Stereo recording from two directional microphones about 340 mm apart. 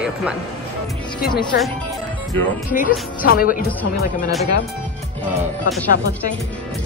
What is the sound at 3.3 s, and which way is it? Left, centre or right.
Speech, left.